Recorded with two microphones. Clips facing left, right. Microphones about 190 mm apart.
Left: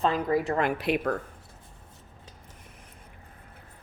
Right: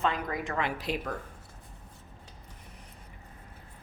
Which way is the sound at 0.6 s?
60° left (ahead or behind).